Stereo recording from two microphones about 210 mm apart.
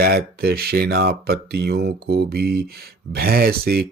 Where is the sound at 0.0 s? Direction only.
45° right (ahead or behind).